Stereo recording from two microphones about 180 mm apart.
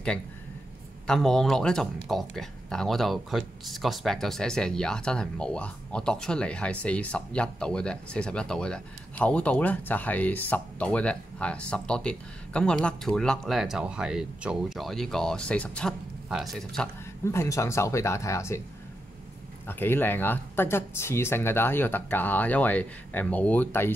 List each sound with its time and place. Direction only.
1.0 s speech: 5° left (ahead or behind)
17.2 s speech: 15° left (ahead or behind)
19.6 s speech: 10° left (ahead or behind)